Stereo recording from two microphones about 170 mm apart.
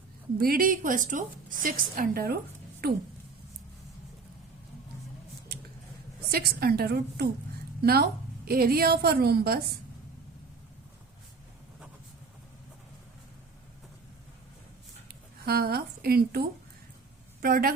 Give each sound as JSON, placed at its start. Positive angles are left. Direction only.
{"t": 0.3, "sound": "a woman's voice", "side_deg": -60}
{"t": 6.3, "sound": "a woman's voice", "side_deg": -65}
{"t": 15.4, "sound": "a woman's voice", "side_deg": -65}